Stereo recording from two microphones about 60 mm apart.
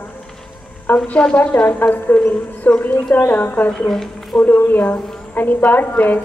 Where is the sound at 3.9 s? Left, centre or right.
Centre.